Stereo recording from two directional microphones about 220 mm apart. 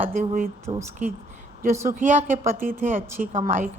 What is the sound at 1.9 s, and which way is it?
Speech, 35° right (ahead or behind).